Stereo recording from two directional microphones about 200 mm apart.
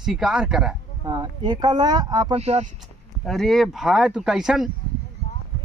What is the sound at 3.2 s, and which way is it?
Speech, centre (ahead or behind).